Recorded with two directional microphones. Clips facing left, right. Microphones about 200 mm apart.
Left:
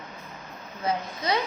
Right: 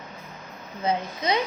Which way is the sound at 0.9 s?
20° right (ahead or behind).